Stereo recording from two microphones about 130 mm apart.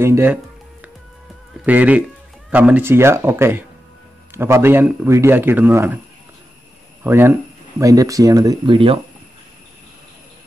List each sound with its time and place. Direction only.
0.0 s speech: 20° right (ahead or behind)
1.7 s a man's voice: 10° right (ahead or behind)
7.0 s a man's voice: 20° right (ahead or behind)
8.7 s speech: 45° right (ahead or behind)